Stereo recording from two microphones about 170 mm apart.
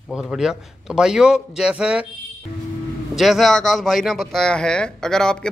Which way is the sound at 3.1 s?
Centre (ahead or behind).